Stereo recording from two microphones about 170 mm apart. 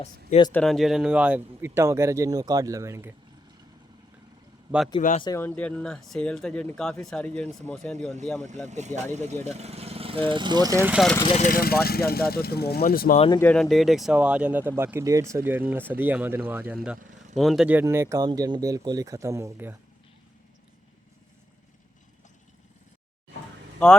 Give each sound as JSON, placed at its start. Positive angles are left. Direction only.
{"t": 0.5, "sound": "speech", "side_deg": 5}
{"t": 4.9, "sound": "speech", "side_deg": 50}
{"t": 5.2, "sound": "speech", "side_deg": 20}
{"t": 5.5, "sound": "speech", "side_deg": 5}
{"t": 8.6, "sound": "speech", "side_deg": -45}
{"t": 10.9, "sound": "speech", "side_deg": 0}
{"t": 11.3, "sound": "speech", "side_deg": 55}
{"t": 13.1, "sound": "speech", "side_deg": 30}
{"t": 13.4, "sound": "speech", "side_deg": 5}